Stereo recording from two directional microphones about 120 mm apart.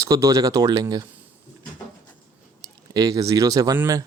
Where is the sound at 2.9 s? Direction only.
30° right (ahead or behind).